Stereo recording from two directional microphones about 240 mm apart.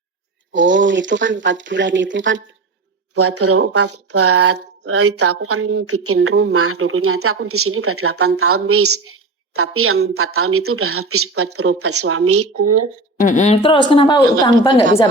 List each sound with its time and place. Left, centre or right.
0.5 s speech: right
3.2 s a woman's voice: right
13.1 s speech: left